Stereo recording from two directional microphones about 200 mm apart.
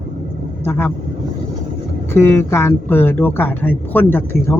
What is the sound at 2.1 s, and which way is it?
Speech, 10° left (ahead or behind).